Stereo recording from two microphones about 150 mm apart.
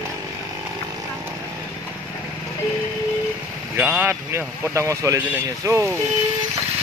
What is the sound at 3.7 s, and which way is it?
Speech, 10° right (ahead or behind).